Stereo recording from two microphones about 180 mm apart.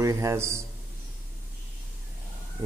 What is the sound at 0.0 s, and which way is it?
Speech, 15° right (ahead or behind).